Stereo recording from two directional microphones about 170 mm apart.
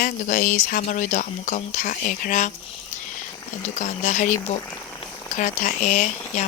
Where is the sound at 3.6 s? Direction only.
45° left (ahead or behind).